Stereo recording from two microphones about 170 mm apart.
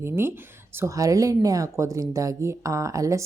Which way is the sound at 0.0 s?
15° right (ahead or behind).